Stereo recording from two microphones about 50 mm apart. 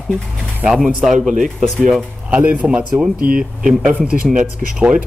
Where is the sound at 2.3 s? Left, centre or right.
Right.